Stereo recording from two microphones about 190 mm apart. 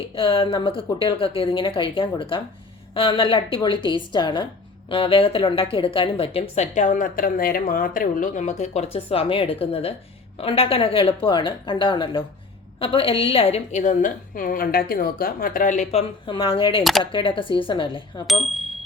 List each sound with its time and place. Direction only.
0.2 s a woman's voice: 30° left (ahead or behind)